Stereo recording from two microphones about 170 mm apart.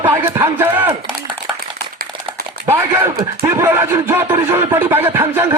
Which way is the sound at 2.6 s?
15° right (ahead or behind).